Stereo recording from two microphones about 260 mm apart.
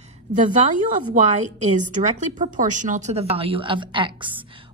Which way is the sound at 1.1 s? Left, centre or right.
Right.